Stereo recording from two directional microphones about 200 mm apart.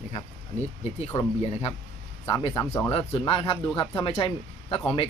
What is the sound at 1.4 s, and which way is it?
Speech, 30° left (ahead or behind).